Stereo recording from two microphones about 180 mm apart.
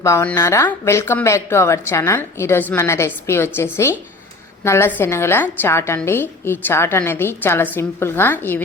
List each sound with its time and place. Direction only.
0.0 s a woman's voice: 15° left (ahead or behind)